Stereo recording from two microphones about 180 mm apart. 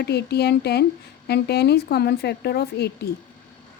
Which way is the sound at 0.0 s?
65° left (ahead or behind).